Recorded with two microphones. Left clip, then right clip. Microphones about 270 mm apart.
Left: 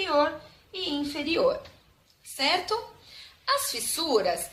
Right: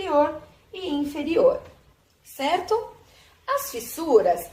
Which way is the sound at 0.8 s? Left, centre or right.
Left.